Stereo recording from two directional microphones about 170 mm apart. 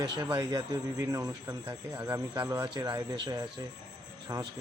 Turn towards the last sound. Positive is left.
turn(degrees=-20)  # may be behind; listen again after turning